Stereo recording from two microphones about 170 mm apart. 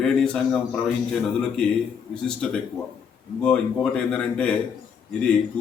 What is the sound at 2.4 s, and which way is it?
A man's voice, 5° left (ahead or behind).